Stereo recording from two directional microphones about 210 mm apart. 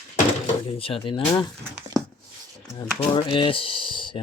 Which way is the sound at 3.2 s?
25° left (ahead or behind).